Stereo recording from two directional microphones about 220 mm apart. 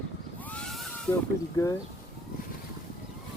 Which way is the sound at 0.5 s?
Centre (ahead or behind).